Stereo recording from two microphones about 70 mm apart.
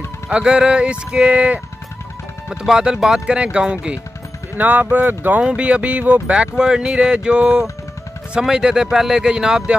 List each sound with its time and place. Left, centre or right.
0.3 s speech: centre